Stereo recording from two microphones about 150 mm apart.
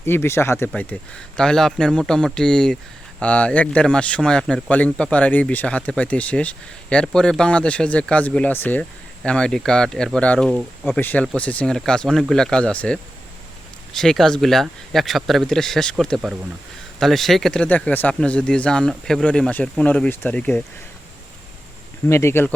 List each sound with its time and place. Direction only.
0.0 s speech: 15° left (ahead or behind)
22.0 s speech: 15° left (ahead or behind)